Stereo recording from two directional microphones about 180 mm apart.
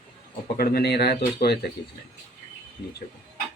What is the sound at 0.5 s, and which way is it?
Speech, 55° left (ahead or behind).